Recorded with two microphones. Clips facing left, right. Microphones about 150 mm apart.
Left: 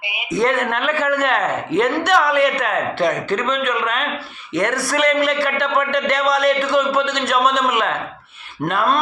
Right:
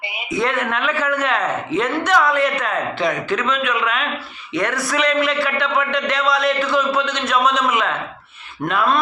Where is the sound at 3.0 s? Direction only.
40° left (ahead or behind).